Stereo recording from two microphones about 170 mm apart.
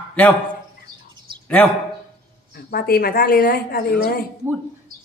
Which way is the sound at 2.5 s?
60° left (ahead or behind).